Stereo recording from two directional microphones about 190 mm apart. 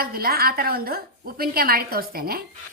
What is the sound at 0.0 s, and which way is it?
A woman's voice, 50° right (ahead or behind).